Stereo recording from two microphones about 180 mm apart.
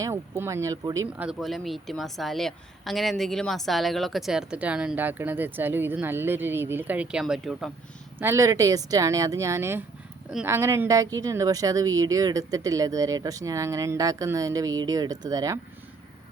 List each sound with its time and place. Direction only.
0.0 s speech: 15° right (ahead or behind)
1.3 s a woman's voice: centre (ahead or behind)
8.2 s speech: 15° right (ahead or behind)